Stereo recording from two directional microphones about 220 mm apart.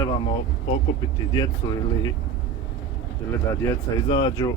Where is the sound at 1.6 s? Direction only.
15° left (ahead or behind).